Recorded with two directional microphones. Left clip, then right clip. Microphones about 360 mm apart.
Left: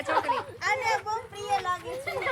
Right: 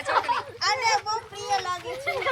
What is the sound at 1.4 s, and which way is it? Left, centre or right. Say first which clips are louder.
Children playing: even; centre.